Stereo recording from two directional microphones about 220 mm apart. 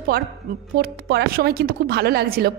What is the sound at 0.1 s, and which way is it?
A woman's voice, 45° right (ahead or behind).